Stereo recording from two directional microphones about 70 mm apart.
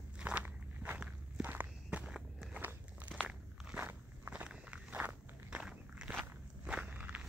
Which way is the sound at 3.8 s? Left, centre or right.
Right.